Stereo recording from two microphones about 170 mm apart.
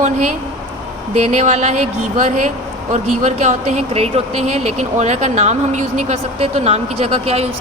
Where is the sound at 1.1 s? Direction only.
40° right (ahead or behind).